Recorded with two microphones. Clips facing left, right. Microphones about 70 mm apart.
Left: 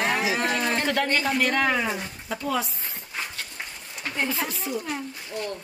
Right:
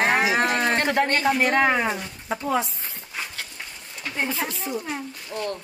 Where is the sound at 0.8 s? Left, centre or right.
Right.